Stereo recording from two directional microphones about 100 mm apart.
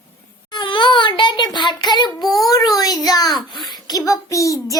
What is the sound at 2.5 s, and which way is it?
A child's voice, 40° left (ahead or behind).